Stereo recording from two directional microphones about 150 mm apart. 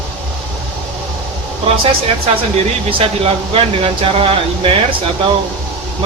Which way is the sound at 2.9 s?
40° right (ahead or behind).